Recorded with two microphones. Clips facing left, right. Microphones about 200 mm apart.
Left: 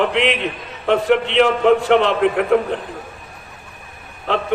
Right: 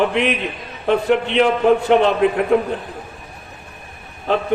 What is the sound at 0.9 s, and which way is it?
A man's voice, 75° left (ahead or behind).